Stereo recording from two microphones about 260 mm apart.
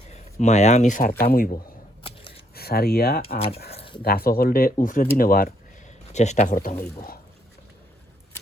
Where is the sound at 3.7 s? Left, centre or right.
Left.